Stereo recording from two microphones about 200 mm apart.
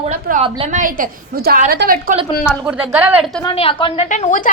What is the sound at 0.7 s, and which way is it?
A woman's voice, 40° right (ahead or behind).